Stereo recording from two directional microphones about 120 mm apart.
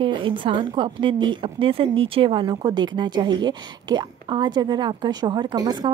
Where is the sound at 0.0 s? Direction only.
45° right (ahead or behind).